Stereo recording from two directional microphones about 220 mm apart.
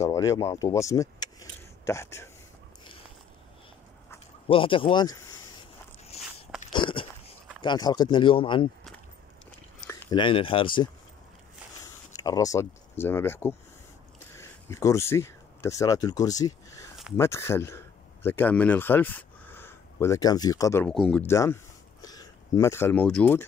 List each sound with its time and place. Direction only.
0.0 s speech: 15° left (ahead or behind)
4.5 s a man's voice: 25° left (ahead or behind)
6.7 s biting: 20° left (ahead or behind)
7.6 s speech: 20° left (ahead or behind)
9.8 s speech: 15° left (ahead or behind)
12.1 s speech: 15° left (ahead or behind)
20.9 s speech: centre (ahead or behind)
21.3 s speech: 10° left (ahead or behind)